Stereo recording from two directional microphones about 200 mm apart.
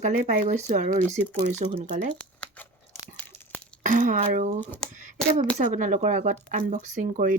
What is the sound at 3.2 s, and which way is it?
Tearing, 10° left (ahead or behind).